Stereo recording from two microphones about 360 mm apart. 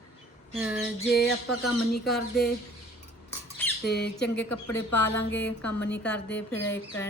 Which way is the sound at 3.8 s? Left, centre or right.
Left.